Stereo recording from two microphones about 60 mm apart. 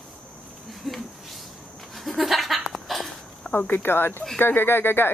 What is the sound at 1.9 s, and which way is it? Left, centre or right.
Goat, centre.